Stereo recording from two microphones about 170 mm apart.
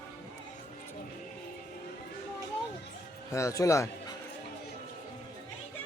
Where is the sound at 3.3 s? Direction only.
20° left (ahead or behind).